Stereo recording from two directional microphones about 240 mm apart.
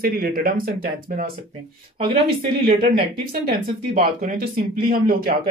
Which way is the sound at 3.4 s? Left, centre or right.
Right.